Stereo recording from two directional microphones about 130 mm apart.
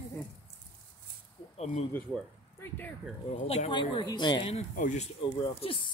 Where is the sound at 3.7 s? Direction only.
35° left (ahead or behind).